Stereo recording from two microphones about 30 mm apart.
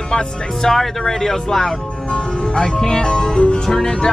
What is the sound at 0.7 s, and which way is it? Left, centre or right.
Speech, centre.